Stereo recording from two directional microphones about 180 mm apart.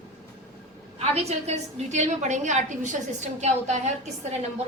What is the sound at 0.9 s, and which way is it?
A woman's voice, 35° right (ahead or behind).